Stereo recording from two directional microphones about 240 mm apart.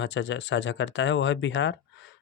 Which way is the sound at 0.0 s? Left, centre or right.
Left.